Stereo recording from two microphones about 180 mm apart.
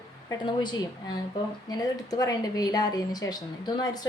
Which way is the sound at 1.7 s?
20° left (ahead or behind).